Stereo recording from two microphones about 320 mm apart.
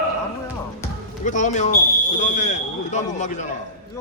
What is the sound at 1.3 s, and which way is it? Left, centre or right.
Speech, left.